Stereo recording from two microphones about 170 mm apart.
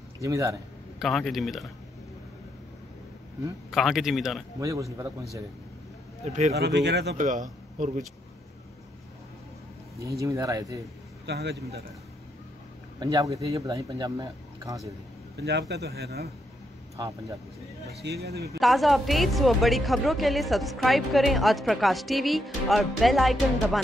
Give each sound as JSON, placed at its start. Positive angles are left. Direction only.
{"t": 0.2, "sound": "speech", "side_deg": -20}
{"t": 0.9, "sound": "a woman's voice", "side_deg": 0}
{"t": 3.7, "sound": "a woman's voice", "side_deg": 0}
{"t": 4.6, "sound": "speech", "side_deg": -20}
{"t": 6.2, "sound": "speech", "side_deg": -40}
{"t": 6.5, "sound": "speech", "side_deg": -85}
{"t": 7.2, "sound": "a man's voice", "side_deg": -45}
{"t": 10.2, "sound": "speech", "side_deg": -20}
{"t": 11.2, "sound": "speech", "side_deg": -80}
{"t": 13.0, "sound": "speech", "side_deg": -20}
{"t": 15.3, "sound": "speech", "side_deg": -80}
{"t": 18.2, "sound": "speech", "side_deg": -75}
{"t": 18.6, "sound": "a woman's voice", "side_deg": 0}